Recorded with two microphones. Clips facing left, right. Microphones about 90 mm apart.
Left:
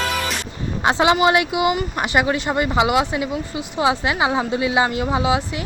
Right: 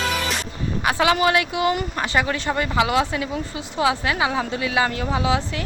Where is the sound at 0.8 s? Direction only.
20° left (ahead or behind).